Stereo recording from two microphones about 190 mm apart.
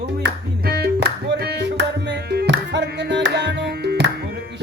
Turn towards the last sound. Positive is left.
turn(degrees=-60)  # may be behind; listen again after turning